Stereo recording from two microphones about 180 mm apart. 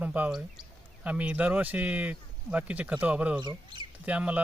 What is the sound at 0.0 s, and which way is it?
Speech, 10° right (ahead or behind).